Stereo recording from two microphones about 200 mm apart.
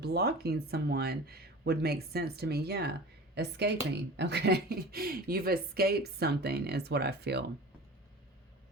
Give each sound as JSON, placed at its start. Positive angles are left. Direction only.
{"t": 0.0, "sound": "a woman's voice", "side_deg": -55}